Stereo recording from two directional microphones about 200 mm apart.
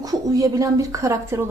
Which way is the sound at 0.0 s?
15° right (ahead or behind).